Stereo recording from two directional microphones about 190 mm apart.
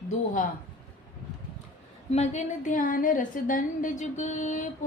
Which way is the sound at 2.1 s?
35° left (ahead or behind).